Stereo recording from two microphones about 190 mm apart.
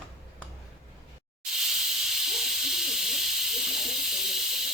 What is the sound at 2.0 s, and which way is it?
Hiss, centre (ahead or behind).